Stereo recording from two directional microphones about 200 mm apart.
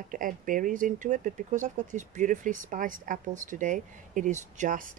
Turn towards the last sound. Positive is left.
turn(degrees=-40)  # may be behind; listen again after turning